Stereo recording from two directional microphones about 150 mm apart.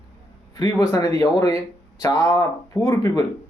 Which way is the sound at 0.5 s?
20° left (ahead or behind).